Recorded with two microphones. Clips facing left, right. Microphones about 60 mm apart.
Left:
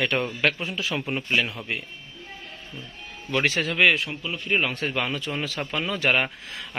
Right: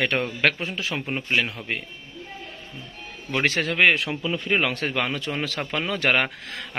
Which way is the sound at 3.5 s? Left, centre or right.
Right.